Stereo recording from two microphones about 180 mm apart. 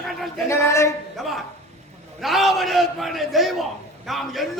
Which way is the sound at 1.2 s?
Centre (ahead or behind).